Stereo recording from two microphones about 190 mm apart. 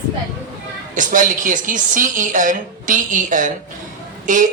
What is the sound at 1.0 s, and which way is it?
A woman's voice, 45° right (ahead or behind).